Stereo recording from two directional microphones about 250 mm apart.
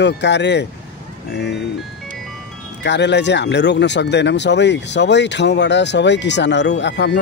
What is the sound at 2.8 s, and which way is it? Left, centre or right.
Speech, left.